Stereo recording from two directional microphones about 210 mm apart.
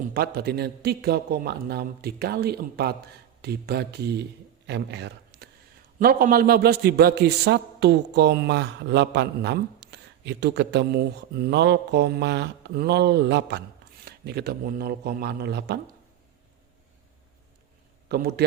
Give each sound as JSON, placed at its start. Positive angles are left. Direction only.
{"t": 0.1, "sound": "a man's voice", "side_deg": -45}
{"t": 18.1, "sound": "a man's voice", "side_deg": -50}